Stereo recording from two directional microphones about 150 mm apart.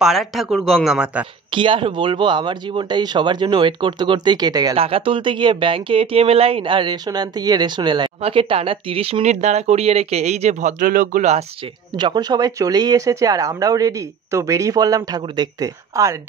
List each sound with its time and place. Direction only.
0.0 s speech: centre (ahead or behind)
1.5 s speech: 35° right (ahead or behind)
4.7 s speech: 40° right (ahead or behind)
12.0 s speech: 30° right (ahead or behind)